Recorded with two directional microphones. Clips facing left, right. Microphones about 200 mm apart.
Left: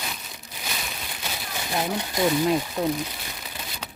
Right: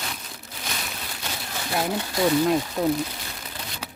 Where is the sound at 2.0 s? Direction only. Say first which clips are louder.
Right 2 dB; 15° left (ahead or behind).